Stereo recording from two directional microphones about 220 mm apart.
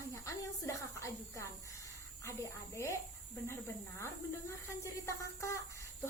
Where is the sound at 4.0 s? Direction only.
10° left (ahead or behind).